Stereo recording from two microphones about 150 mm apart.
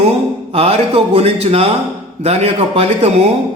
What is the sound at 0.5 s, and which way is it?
A man's voice, 45° right (ahead or behind).